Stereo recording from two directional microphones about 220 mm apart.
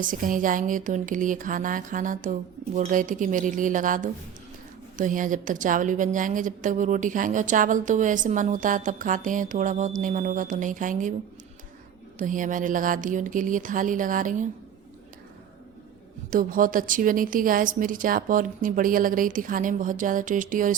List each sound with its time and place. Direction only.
0.0 s a woman's voice: 40° right (ahead or behind)
12.2 s a woman's voice: 35° right (ahead or behind)
16.3 s a woman's voice: 40° right (ahead or behind)